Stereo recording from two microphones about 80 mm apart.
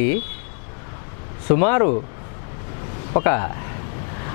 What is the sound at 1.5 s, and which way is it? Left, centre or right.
Speech, centre.